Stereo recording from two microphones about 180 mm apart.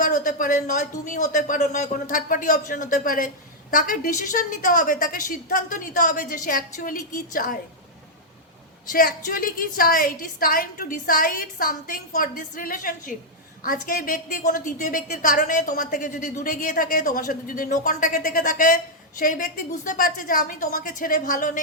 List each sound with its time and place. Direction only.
0.0 s speech: 45° left (ahead or behind)
8.9 s speech: 50° left (ahead or behind)